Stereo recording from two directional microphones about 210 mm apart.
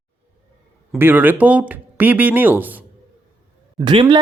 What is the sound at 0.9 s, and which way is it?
Speech, 10° right (ahead or behind).